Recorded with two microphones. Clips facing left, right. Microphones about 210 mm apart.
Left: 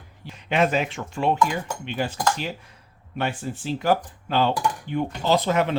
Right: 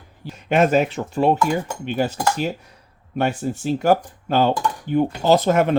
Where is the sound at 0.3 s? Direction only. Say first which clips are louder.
Right 5 dB; 45° right (ahead or behind).